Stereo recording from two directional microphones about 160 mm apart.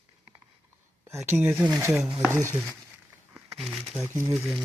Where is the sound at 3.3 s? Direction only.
5° right (ahead or behind).